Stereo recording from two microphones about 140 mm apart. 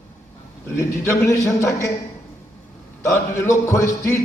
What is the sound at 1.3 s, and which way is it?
Speech, 20° left (ahead or behind).